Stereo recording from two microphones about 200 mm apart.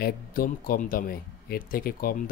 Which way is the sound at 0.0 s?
45° left (ahead or behind).